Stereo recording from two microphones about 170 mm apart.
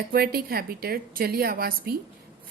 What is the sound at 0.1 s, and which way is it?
Speech, 65° right (ahead or behind).